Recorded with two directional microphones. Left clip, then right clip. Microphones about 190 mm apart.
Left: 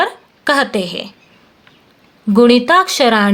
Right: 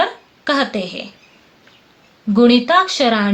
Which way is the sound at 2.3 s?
45° left (ahead or behind).